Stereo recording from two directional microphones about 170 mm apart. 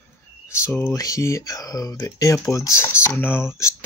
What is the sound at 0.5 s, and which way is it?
Speech, 10° left (ahead or behind).